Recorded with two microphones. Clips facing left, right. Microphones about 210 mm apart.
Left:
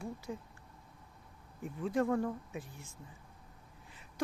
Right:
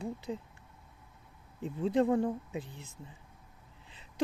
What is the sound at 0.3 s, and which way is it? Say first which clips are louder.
Speech: right 4 dB; 20° right (ahead or behind).